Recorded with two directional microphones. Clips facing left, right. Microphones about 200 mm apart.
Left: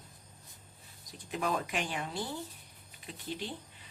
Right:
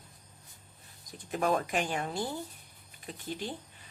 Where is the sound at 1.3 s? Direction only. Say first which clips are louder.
Right 4 dB; 50° right (ahead or behind).